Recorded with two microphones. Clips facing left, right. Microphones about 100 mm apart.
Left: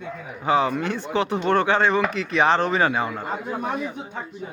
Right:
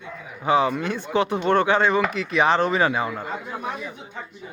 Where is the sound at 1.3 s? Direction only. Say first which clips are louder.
Even; 15° right (ahead or behind).